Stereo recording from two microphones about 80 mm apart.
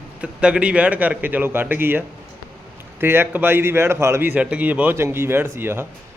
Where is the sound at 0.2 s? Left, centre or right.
Centre; by 4.3 s right.